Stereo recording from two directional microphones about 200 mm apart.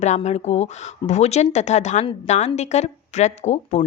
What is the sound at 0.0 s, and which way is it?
A woman's voice, 35° left (ahead or behind).